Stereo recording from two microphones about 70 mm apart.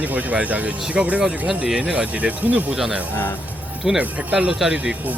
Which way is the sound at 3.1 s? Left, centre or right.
Left.